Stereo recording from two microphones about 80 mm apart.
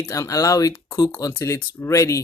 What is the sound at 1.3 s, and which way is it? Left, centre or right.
Speech, left.